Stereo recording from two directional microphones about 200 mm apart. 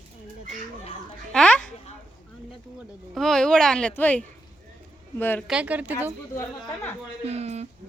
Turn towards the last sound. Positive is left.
turn(degrees=-30)  # may be behind; listen again after turning